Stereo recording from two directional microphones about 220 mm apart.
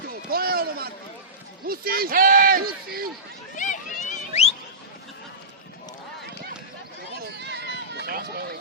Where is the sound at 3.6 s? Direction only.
35° left (ahead or behind).